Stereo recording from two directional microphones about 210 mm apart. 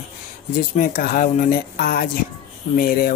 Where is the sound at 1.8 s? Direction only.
45° left (ahead or behind).